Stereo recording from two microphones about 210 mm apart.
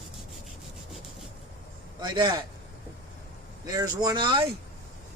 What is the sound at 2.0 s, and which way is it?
Speech, 20° right (ahead or behind).